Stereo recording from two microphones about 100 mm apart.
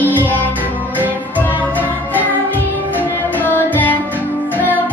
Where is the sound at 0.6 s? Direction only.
15° right (ahead or behind).